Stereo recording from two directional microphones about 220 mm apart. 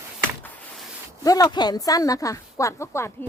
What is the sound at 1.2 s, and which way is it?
A woman's voice, 15° left (ahead or behind).